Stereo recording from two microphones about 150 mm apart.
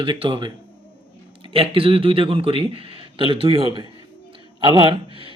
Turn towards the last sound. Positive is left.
turn(degrees=-35)  # may be behind; listen again after turning